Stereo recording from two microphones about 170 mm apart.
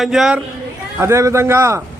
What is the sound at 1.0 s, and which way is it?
Speech, 15° right (ahead or behind).